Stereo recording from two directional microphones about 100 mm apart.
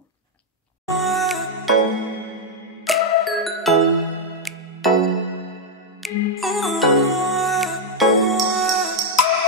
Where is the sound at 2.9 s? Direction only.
Centre (ahead or behind).